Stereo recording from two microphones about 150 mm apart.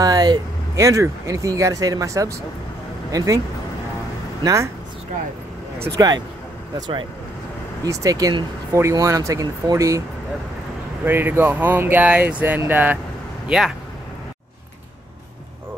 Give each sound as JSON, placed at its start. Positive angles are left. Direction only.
{"t": 0.0, "sound": "speech", "side_deg": -25}
{"t": 4.4, "sound": "speech", "side_deg": -25}
{"t": 5.9, "sound": "speech", "side_deg": -25}
{"t": 7.8, "sound": "speech", "side_deg": -25}
{"t": 11.1, "sound": "speech", "side_deg": -15}